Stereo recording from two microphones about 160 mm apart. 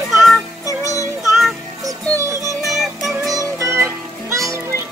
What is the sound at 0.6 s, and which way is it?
Music, 20° left (ahead or behind).